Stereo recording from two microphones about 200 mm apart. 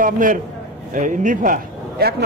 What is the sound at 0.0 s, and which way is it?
A man's voice, 40° right (ahead or behind).